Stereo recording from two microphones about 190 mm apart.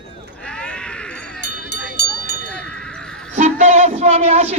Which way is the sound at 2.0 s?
60° left (ahead or behind).